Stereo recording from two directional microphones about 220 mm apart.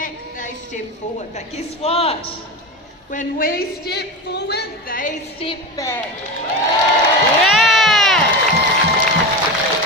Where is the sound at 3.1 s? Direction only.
40° left (ahead or behind).